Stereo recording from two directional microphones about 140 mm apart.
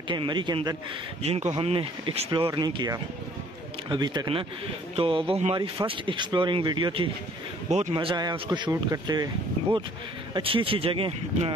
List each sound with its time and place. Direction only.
0.1 s speech: 35° right (ahead or behind)
1.2 s speech: 45° right (ahead or behind); by 9.3 s 25° right (ahead or behind)
10.3 s speech: 40° right (ahead or behind)